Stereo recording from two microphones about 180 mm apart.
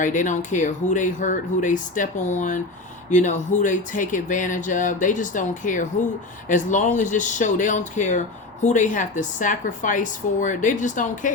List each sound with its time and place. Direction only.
0.0 s speech: 45° left (ahead or behind)